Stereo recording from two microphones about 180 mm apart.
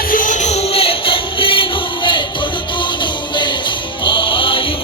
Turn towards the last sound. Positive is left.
turn(degrees=30)  # may be behind; listen again after turning